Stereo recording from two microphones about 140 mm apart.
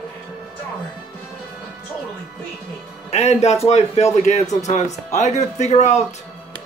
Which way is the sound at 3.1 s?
50° left (ahead or behind).